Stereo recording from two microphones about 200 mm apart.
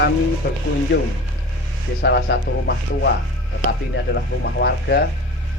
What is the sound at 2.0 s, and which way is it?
Speech, 60° left (ahead or behind).